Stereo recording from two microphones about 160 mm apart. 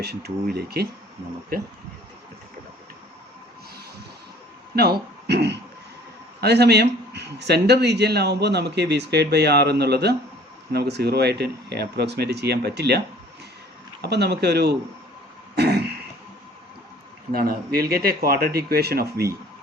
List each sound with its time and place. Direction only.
0.0 s speech: 90° right
4.7 s a man's voice: 80° right
14.0 s a man's voice: 90° right
15.5 s throat clearing: 90° right
17.3 s speech: 70° right (ahead or behind)